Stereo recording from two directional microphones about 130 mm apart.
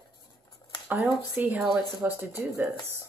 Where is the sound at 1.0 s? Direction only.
15° right (ahead or behind).